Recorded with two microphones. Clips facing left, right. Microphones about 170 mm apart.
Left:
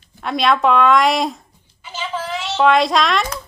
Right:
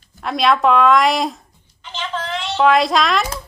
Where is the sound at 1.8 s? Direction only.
10° left (ahead or behind).